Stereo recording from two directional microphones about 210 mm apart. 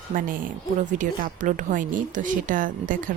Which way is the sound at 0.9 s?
40° right (ahead or behind).